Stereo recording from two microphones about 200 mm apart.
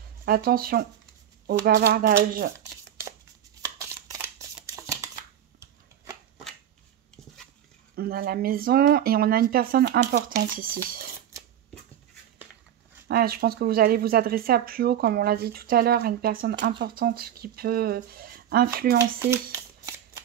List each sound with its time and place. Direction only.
0.2 s speech: 50° right (ahead or behind)
3.8 s shuffling cards: 15° right (ahead or behind)
4.6 s a sound: 15° right (ahead or behind)
5.6 s shuffling cards: 20° right (ahead or behind)
7.9 s speech: 50° right (ahead or behind)
10.9 s a sound: 45° right (ahead or behind)
13.1 s speech: 50° right (ahead or behind)